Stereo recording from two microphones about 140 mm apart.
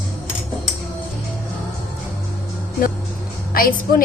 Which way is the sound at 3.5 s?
90° left.